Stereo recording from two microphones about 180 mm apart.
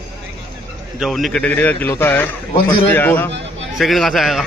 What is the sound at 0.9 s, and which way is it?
A man's voice, centre (ahead or behind).